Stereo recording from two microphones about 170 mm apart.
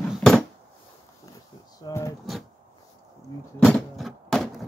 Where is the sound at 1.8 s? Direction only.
20° left (ahead or behind).